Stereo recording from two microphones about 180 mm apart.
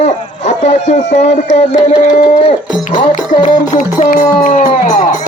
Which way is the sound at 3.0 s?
45° left (ahead or behind).